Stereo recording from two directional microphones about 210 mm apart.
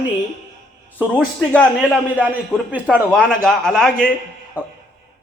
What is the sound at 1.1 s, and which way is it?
A man's voice, 5° left (ahead or behind).